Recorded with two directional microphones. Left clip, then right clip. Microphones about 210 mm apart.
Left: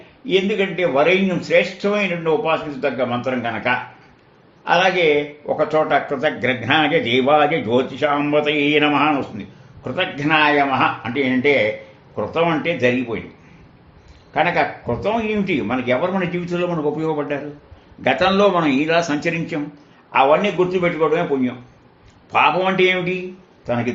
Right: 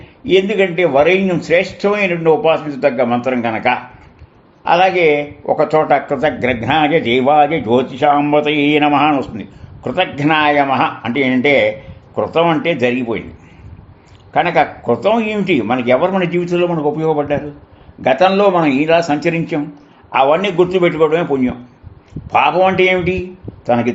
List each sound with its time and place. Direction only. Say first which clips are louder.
0.3 s speech: right 6 dB; 60° right (ahead or behind)
14.3 s a man's voice: right 5 dB; 45° right (ahead or behind)
20.1 s a man's voice: right 2 dB; 45° right (ahead or behind)